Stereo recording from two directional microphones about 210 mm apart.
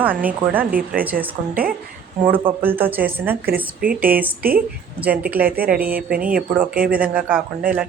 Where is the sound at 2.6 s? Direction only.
10° right (ahead or behind).